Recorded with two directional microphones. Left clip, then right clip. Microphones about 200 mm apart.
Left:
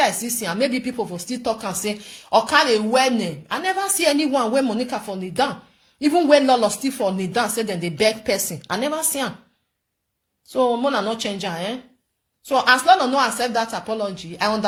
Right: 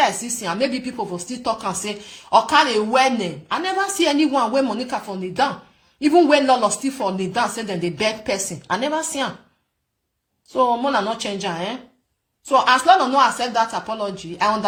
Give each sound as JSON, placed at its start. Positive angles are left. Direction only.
{"t": 0.0, "sound": "speech", "side_deg": 40}
{"t": 10.5, "sound": "speech", "side_deg": 35}